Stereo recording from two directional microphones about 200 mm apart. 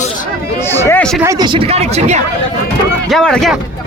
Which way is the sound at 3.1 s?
5° left (ahead or behind).